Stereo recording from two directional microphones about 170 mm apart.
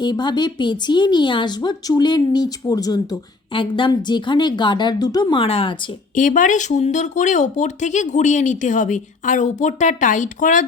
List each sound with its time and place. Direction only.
0.0 s a woman's voice: 25° left (ahead or behind)
6.1 s speech: 50° left (ahead or behind)